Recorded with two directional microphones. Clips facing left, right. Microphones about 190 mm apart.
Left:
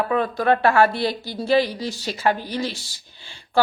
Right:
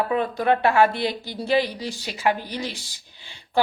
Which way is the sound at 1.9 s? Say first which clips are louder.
Left 3 dB; 40° left (ahead or behind).